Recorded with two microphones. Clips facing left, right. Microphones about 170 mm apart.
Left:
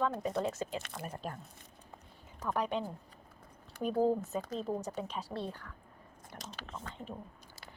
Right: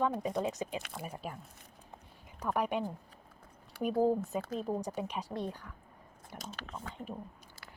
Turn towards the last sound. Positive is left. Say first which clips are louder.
# right 1 dB
turn(degrees=-5)  # may be behind; listen again after turning